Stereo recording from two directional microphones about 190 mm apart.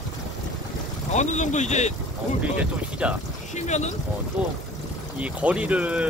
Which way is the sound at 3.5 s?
35° left (ahead or behind).